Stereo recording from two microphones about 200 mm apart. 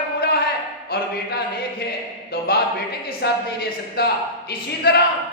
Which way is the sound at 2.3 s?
50° left (ahead or behind).